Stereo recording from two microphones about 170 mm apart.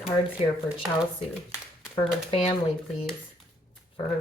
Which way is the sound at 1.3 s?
Centre (ahead or behind).